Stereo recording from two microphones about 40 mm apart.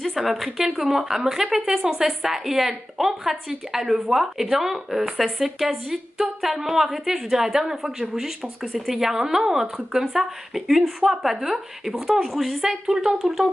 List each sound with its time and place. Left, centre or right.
0.0 s a woman's voice: centre
12.8 s a woman's voice: centre